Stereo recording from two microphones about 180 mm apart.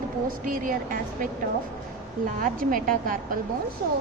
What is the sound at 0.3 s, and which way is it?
A woman's voice, 50° right (ahead or behind).